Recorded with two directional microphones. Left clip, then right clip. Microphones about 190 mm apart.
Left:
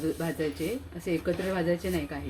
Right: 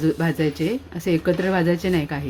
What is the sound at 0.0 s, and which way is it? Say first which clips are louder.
Speech: right 9 dB; 55° right (ahead or behind).